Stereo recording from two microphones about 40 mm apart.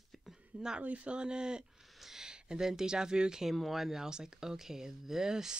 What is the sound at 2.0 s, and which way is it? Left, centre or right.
Speech, centre.